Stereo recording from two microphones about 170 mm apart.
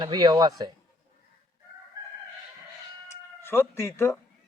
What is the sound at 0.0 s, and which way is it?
Speech, 25° right (ahead or behind).